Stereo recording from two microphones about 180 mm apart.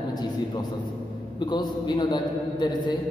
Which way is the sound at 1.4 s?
25° left (ahead or behind).